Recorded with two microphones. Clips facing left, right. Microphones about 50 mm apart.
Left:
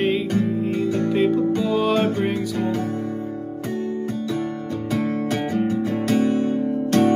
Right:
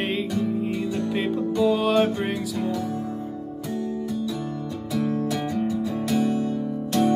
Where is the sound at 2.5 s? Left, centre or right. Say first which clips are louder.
Left 3 dB; left.